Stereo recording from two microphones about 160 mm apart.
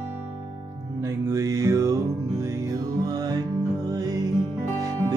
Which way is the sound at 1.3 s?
20° right (ahead or behind).